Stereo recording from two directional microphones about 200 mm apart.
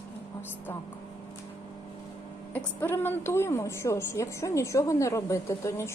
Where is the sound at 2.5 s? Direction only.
10° left (ahead or behind).